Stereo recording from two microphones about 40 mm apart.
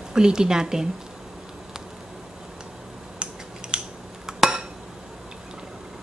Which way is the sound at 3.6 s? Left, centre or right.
Right.